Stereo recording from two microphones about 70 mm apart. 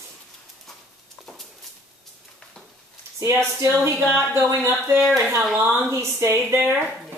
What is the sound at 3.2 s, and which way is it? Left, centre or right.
Speech, right.